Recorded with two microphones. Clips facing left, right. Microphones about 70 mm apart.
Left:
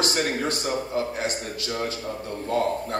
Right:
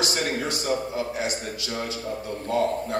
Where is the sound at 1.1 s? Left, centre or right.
Left.